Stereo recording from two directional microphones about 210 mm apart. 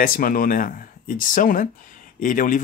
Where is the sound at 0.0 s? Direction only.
40° left (ahead or behind).